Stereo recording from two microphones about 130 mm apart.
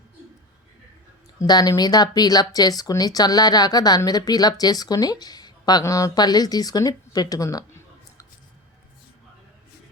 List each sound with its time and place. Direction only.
1.4 s speech: 30° left (ahead or behind)